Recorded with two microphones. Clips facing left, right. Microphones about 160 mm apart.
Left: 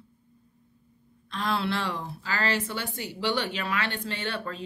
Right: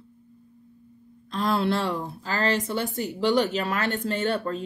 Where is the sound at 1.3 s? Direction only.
45° right (ahead or behind).